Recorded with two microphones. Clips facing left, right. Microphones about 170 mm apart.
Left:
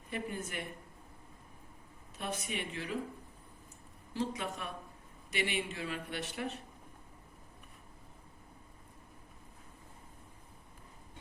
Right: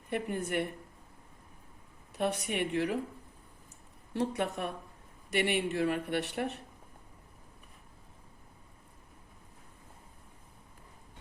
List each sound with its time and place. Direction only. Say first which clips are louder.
0.1 s speech: right 7 dB; 65° right (ahead or behind)
2.1 s speech: right 8 dB; 65° right (ahead or behind)
4.1 s speech: right 5 dB; 65° right (ahead or behind)